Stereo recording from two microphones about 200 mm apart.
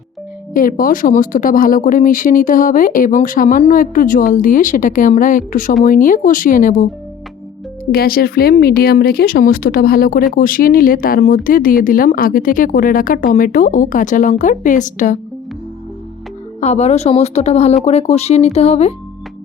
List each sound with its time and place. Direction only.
0.5 s speech: 45° left (ahead or behind)
7.9 s speech: 50° left (ahead or behind)
16.6 s speech: 35° left (ahead or behind)